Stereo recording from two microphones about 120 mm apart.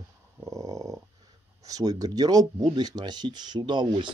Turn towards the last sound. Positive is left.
turn(degrees=-40)  # may be behind; listen again after turning